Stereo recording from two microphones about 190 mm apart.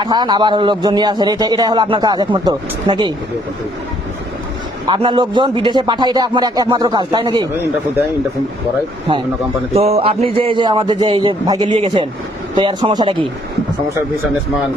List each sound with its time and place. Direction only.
0.0 s a man's voice: 20° right (ahead or behind)
4.9 s a man's voice: 25° right (ahead or behind)
9.7 s a man's voice: 30° right (ahead or behind)